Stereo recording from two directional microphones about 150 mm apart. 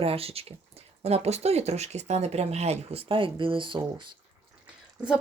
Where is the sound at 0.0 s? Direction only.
40° right (ahead or behind).